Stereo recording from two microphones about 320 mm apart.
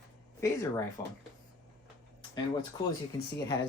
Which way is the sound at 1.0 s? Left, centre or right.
Centre.